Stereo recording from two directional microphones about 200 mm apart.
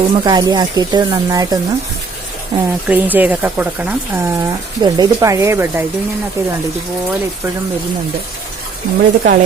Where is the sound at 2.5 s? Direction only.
25° right (ahead or behind).